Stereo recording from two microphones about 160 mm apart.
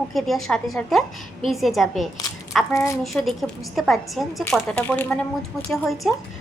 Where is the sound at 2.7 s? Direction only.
20° left (ahead or behind).